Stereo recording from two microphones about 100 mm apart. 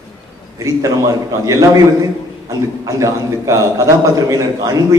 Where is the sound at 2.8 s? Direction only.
30° right (ahead or behind).